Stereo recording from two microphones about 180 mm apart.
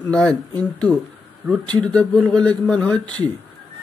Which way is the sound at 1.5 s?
5° left (ahead or behind).